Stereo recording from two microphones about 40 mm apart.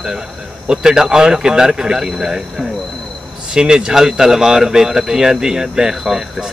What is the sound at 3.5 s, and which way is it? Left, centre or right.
Speech, right.